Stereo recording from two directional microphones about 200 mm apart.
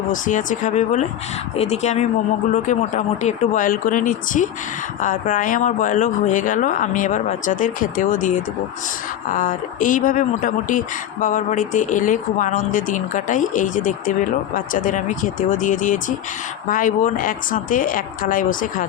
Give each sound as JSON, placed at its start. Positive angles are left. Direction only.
{"t": 0.1, "sound": "a woman's voice", "side_deg": 40}